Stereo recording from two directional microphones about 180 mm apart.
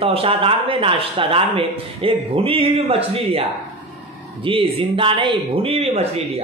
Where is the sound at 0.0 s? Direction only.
30° right (ahead or behind).